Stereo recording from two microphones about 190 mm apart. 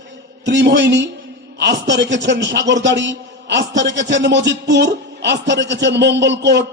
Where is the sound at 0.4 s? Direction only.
70° right (ahead or behind).